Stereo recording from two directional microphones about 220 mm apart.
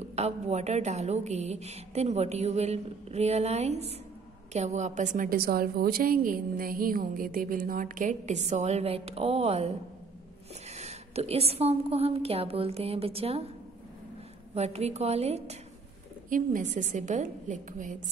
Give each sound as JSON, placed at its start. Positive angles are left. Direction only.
{"t": 0.1, "sound": "a woman's voice", "side_deg": -30}
{"t": 10.7, "sound": "a woman's voice", "side_deg": -30}
{"t": 14.5, "sound": "a woman's voice", "side_deg": -30}